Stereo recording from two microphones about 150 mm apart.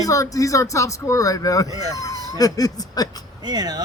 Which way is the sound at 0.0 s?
20° left (ahead or behind).